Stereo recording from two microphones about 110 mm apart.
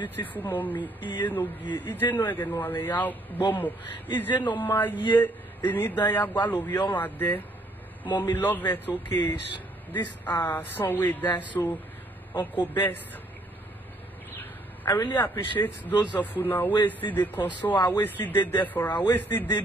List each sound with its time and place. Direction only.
0.0 s speech: 15° left (ahead or behind)
14.3 s a man's voice: 20° left (ahead or behind)